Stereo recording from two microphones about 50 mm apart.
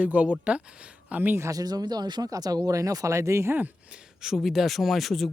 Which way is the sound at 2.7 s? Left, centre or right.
Right.